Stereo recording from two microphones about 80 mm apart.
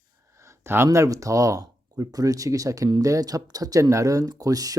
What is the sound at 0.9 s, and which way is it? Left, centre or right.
Speech, right.